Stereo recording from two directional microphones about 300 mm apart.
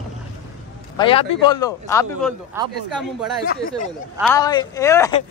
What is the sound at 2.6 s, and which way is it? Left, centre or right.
Speech, centre.